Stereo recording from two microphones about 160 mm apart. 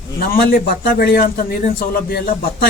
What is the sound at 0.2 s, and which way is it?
Speech, 65° left (ahead or behind).